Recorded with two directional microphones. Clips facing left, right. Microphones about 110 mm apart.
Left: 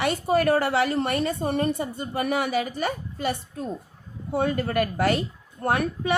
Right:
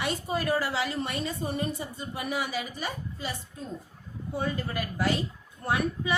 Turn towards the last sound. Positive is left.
turn(degrees=55)  # may be behind; listen again after turning